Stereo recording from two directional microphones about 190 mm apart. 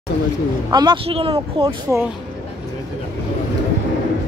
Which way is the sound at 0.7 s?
25° right (ahead or behind).